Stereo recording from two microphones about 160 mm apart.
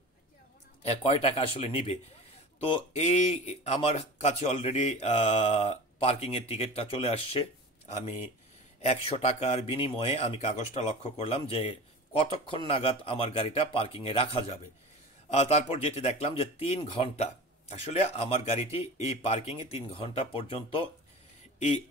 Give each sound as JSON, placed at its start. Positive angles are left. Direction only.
{"t": 0.8, "sound": "speech", "side_deg": 40}
{"t": 8.8, "sound": "speech", "side_deg": 40}